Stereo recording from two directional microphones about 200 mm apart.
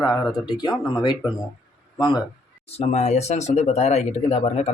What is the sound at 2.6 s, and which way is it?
Speech, 30° left (ahead or behind).